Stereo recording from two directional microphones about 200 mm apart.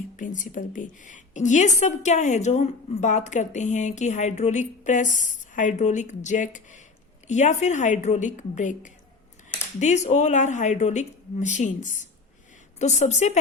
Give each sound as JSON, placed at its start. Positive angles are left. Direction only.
{"t": 0.2, "sound": "a woman's voice", "side_deg": 40}